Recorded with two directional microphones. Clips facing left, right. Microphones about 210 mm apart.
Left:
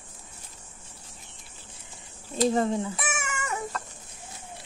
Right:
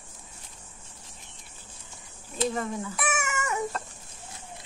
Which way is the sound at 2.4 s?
30° left (ahead or behind).